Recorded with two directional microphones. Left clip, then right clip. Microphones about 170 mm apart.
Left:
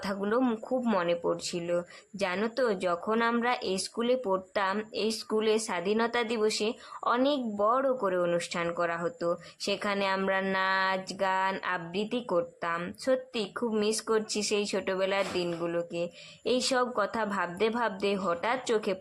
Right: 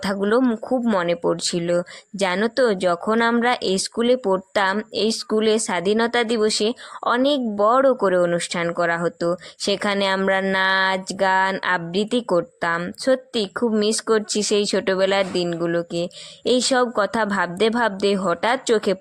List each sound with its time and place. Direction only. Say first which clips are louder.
0.0 s speech: right 9 dB; 45° right (ahead or behind)